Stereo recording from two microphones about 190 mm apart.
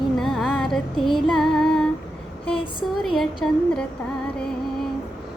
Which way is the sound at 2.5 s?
25° left (ahead or behind).